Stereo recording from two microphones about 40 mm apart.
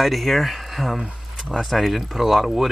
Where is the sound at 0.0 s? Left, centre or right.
Centre.